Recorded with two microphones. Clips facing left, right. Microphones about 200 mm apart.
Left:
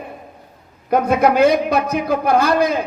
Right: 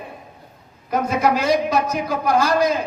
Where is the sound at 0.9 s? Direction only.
60° left (ahead or behind).